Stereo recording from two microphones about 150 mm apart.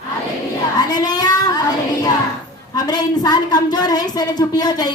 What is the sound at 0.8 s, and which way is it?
Child singing, 25° left (ahead or behind).